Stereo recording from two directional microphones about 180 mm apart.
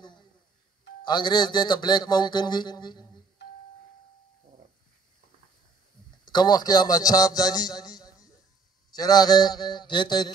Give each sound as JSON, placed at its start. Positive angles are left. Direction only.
{"t": 1.0, "sound": "a man's voice", "side_deg": 25}
{"t": 6.2, "sound": "a man's voice", "side_deg": 25}